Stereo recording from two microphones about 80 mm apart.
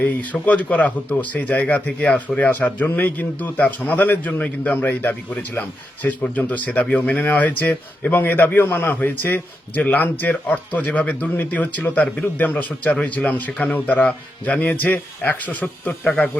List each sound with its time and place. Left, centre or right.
0.0 s speech: centre